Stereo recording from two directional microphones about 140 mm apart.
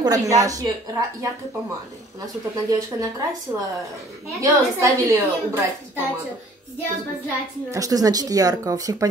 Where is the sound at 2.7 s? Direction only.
25° right (ahead or behind).